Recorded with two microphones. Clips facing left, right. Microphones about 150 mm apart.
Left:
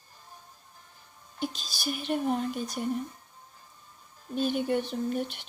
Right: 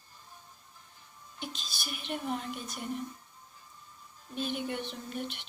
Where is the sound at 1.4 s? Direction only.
40° left (ahead or behind).